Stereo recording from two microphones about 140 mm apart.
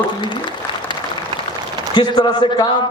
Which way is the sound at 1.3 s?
35° right (ahead or behind).